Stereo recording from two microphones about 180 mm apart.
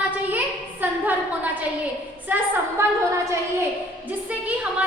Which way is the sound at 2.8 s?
15° right (ahead or behind).